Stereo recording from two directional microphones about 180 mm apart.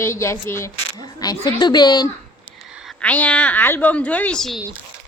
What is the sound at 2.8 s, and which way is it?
A woman's voice, 5° left (ahead or behind).